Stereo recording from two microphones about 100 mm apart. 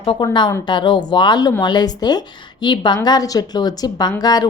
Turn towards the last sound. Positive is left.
turn(degrees=40)  # may be behind; listen again after turning